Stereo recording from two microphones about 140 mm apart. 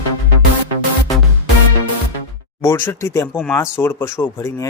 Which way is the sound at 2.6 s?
20° left (ahead or behind).